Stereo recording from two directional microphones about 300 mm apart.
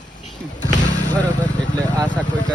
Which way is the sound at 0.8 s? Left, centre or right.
Left.